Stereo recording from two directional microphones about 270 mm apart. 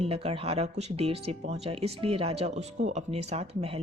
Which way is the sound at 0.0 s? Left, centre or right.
Right.